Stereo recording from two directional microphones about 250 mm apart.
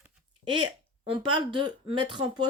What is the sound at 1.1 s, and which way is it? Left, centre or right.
A woman's voice, centre.